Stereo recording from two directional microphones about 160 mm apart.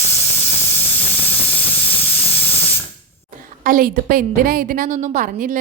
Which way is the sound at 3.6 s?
55° right (ahead or behind).